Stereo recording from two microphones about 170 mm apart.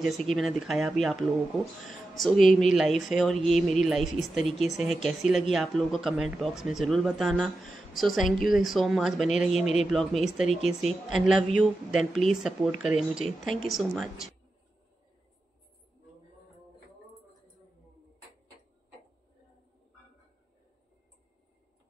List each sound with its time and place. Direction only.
0.0 s speech: centre (ahead or behind)
2.7 s speech: centre (ahead or behind)
9.5 s a man's voice: 40° left (ahead or behind)
9.8 s speech: centre (ahead or behind)